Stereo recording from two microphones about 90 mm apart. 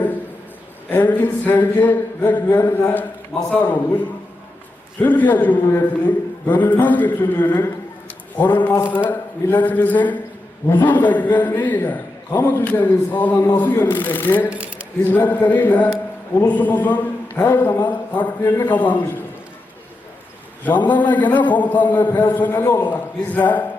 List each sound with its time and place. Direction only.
0.9 s a man's voice: 20° left (ahead or behind)
5.0 s a man's voice: 20° left (ahead or behind)
14.5 s coin: 15° right (ahead or behind)
15.0 s a man's voice: 20° left (ahead or behind)
20.7 s a man's voice: 20° left (ahead or behind)